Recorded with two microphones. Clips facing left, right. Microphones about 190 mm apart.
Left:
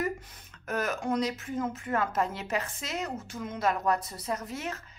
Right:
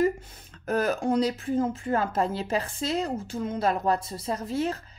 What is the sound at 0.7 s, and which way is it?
Speech, 30° right (ahead or behind).